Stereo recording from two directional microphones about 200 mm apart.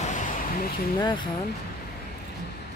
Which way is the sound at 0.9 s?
20° left (ahead or behind).